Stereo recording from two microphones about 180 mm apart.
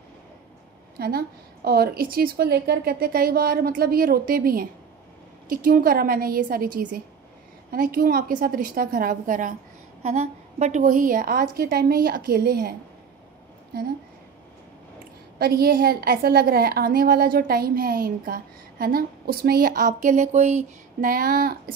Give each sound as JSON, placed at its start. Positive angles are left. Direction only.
{"t": 0.9, "sound": "a woman's voice", "side_deg": -60}
{"t": 15.3, "sound": "a woman's voice", "side_deg": -55}